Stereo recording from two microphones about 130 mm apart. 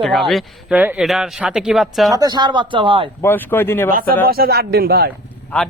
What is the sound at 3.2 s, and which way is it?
Speech, 15° left (ahead or behind).